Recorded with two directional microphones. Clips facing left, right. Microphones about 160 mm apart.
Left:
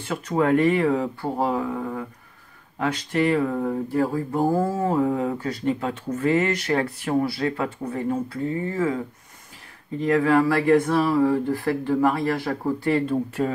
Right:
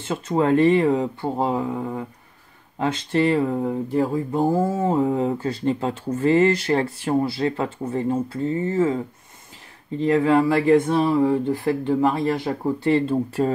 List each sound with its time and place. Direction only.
0.0 s speech: 25° right (ahead or behind)